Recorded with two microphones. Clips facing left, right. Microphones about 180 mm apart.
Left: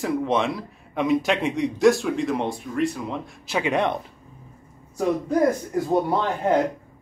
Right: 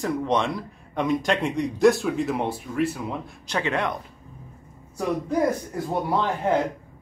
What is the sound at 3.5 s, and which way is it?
Speech, 15° left (ahead or behind).